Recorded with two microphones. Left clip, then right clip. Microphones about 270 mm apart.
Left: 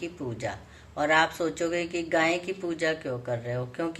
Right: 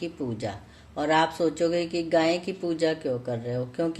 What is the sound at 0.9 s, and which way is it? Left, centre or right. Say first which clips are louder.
Speech: even; right.